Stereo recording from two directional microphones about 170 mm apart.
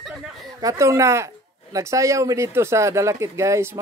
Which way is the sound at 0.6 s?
20° right (ahead or behind).